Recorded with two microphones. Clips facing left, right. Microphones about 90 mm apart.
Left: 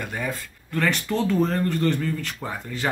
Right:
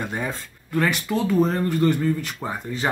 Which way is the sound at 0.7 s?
10° right (ahead or behind).